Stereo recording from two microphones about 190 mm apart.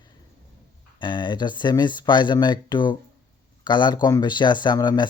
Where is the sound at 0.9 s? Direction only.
25° left (ahead or behind).